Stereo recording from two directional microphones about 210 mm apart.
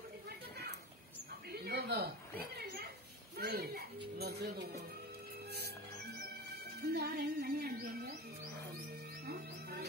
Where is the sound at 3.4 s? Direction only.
45° right (ahead or behind).